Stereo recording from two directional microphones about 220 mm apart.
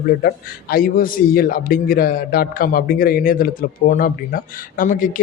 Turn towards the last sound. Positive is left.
turn(degrees=40)  # may be behind; listen again after turning